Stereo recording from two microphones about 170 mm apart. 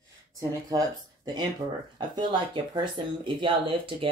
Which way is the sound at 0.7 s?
25° right (ahead or behind).